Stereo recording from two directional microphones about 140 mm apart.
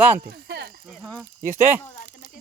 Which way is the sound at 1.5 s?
15° right (ahead or behind).